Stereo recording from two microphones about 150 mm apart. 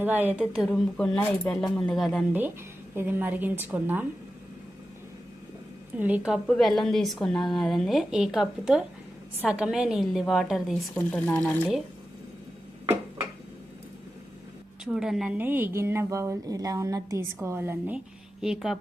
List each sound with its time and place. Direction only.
0.0 s a woman's voice: 10° right (ahead or behind)
0.7 s speech: 10° left (ahead or behind)
2.9 s a woman's voice: 15° right (ahead or behind)
6.0 s a woman's voice: 10° right (ahead or behind)
10.9 s speech: 10° left (ahead or behind)
14.8 s speech: 5° right (ahead or behind)
15.4 s a woman's voice: 15° right (ahead or behind)
18.4 s speech: 5° right (ahead or behind)